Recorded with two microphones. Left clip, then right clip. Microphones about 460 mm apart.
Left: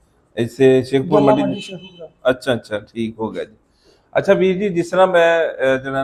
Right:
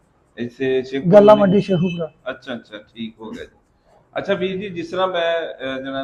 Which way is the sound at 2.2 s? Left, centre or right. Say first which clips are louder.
Left 12 dB; left.